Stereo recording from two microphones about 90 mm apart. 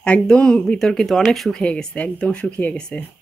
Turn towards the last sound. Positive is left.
turn(degrees=10)  # may be behind; listen again after turning